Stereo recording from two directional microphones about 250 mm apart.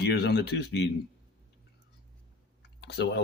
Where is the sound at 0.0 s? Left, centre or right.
Left.